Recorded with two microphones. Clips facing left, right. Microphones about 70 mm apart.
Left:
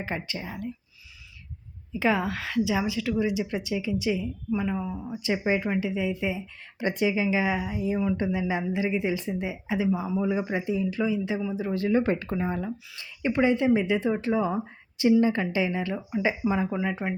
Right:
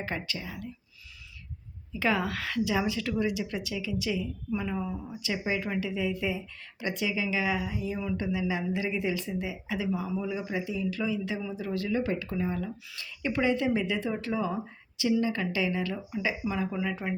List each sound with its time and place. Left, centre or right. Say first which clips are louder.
0.0 s speech: left 2 dB; centre
0.3 s a man's voice: left 4 dB; left
1.9 s a woman's voice: left 3 dB; centre
3.1 s speech: left 3 dB; centre
4.5 s a woman's voice: left 3 dB; centre
5.2 s speech: left 6 dB; left
6.7 s speech: left 6 dB; left
10.2 s a man's voice: left 5 dB; left
10.8 s speech: left 4 dB; left
11.3 s a woman's voice: left 5 dB; centre
11.6 s speech: left 6 dB; left